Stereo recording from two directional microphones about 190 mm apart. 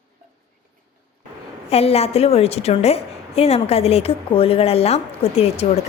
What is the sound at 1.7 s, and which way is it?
A woman's voice, 35° left (ahead or behind).